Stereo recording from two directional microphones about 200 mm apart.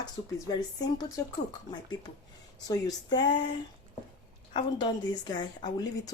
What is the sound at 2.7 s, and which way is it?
Speech, 20° left (ahead or behind).